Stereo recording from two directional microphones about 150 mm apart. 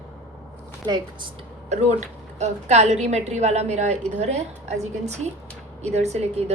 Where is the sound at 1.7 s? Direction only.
50° right (ahead or behind).